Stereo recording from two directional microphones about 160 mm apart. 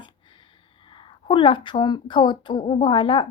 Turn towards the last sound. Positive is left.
turn(degrees=30)  # may be behind; listen again after turning